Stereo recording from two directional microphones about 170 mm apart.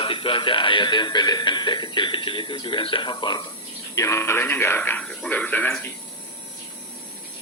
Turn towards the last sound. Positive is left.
turn(degrees=10)  # may be behind; listen again after turning